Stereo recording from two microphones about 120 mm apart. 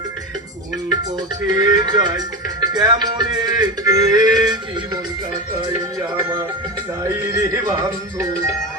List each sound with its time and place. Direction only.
1.5 s music: 35° right (ahead or behind)
7.0 s music: 25° right (ahead or behind)